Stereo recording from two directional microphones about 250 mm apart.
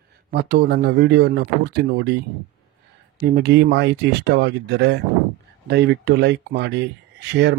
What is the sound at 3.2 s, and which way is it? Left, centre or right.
Speech, right.